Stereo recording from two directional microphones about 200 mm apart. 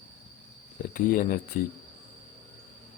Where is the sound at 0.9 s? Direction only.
45° left (ahead or behind).